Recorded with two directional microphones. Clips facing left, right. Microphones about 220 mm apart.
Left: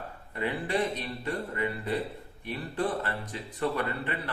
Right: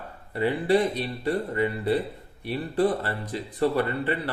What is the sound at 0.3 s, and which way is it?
A man's voice, 35° right (ahead or behind).